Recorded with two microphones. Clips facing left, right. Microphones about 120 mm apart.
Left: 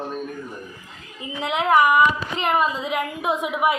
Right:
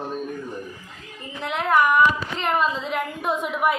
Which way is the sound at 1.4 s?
70° left (ahead or behind).